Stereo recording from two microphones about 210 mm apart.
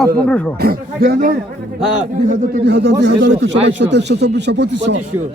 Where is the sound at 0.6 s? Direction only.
45° right (ahead or behind).